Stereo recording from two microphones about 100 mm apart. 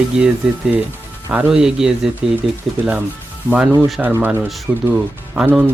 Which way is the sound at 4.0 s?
10° right (ahead or behind).